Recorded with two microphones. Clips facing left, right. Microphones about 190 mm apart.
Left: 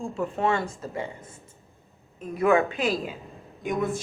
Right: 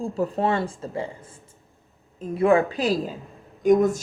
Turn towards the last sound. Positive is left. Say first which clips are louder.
# right 9 dB
turn(degrees=-45)  # may be behind; listen again after turning